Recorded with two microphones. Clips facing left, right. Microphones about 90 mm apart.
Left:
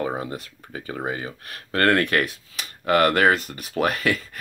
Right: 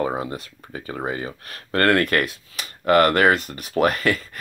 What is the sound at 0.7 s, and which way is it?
Speech, centre (ahead or behind).